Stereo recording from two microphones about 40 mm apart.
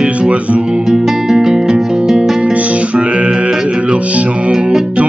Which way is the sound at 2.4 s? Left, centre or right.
Right.